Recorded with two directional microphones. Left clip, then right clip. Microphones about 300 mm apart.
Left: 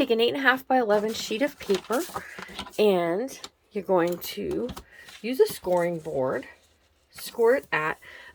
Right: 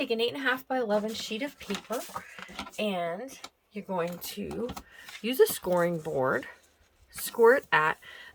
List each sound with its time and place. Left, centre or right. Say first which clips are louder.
0.0 s speech: left 7 dB; centre
5.2 s speech: left 1 dB; centre